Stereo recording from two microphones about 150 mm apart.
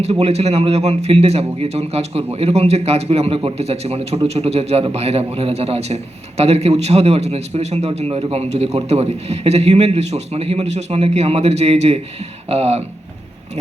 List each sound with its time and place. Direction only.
0.0 s a man's voice: 45° right (ahead or behind)